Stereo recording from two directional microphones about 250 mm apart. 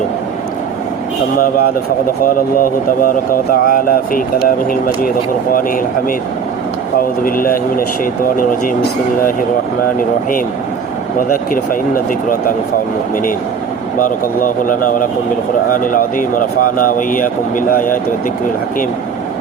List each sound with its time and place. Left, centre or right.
1.4 s speech: left
11.3 s speech: left
14.0 s speech: left